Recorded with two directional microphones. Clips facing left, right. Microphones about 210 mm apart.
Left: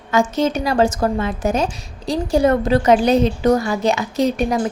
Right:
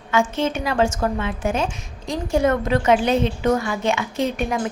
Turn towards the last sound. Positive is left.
turn(degrees=35)  # may be behind; listen again after turning